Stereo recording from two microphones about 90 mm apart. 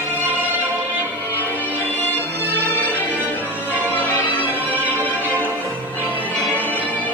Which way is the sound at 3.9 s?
20° right (ahead or behind).